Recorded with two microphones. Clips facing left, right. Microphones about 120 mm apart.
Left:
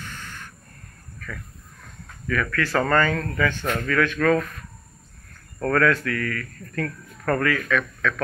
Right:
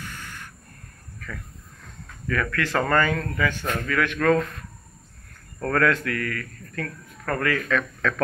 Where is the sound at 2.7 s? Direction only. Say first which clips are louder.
Left 1 dB; 15° right (ahead or behind).